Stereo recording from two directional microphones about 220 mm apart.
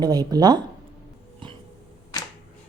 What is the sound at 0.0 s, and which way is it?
Speech, 20° right (ahead or behind).